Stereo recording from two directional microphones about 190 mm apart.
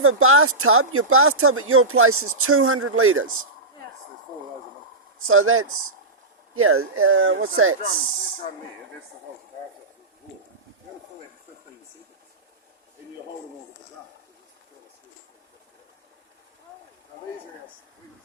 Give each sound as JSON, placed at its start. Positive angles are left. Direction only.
{"t": 0.1, "sound": "speech", "side_deg": -90}
{"t": 5.3, "sound": "speech", "side_deg": -90}